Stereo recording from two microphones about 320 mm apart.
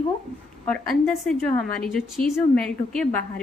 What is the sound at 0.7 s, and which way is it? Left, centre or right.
Speech, centre.